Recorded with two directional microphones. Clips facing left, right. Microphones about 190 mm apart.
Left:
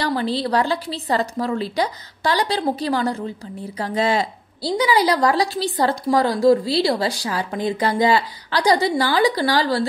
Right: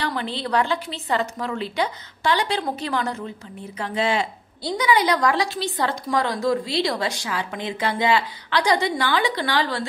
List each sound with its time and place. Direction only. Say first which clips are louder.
0.0 s a woman's voice: left 5 dB; 35° left (ahead or behind)